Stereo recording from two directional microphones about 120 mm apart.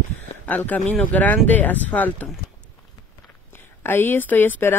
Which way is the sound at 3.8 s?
20° left (ahead or behind).